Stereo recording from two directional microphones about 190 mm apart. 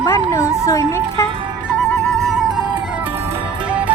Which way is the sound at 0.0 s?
15° left (ahead or behind).